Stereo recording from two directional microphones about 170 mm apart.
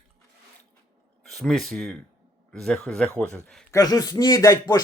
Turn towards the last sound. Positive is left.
turn(degrees=20)  # may be behind; listen again after turning